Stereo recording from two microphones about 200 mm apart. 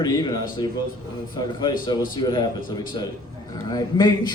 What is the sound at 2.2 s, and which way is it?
Speech, 20° left (ahead or behind).